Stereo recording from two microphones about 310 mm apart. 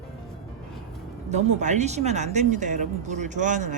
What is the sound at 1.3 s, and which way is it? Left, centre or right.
Speech, right.